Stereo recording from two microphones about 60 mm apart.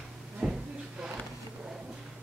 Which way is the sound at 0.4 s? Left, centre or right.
Right.